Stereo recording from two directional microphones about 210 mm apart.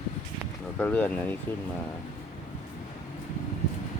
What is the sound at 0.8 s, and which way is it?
Speech, 5° left (ahead or behind).